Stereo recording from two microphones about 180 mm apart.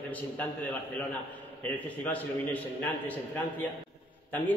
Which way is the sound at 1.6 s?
10° left (ahead or behind).